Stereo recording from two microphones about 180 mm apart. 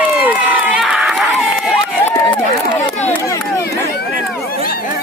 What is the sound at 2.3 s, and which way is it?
Speech, 25° left (ahead or behind).